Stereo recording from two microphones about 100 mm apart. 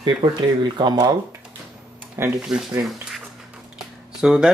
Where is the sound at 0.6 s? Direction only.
50° right (ahead or behind).